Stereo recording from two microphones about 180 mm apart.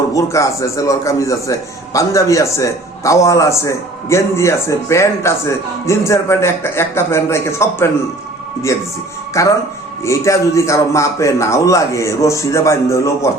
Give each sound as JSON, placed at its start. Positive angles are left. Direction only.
{"t": 0.1, "sound": "a man's voice", "side_deg": 15}
{"t": 9.4, "sound": "a man's voice", "side_deg": 15}